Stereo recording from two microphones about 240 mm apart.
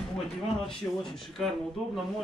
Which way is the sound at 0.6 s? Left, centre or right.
Centre.